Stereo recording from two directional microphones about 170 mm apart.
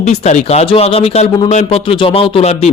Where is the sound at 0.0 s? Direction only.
40° left (ahead or behind).